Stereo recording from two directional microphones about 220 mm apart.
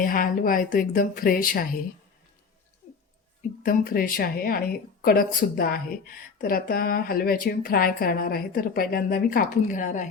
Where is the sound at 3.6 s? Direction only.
40° left (ahead or behind).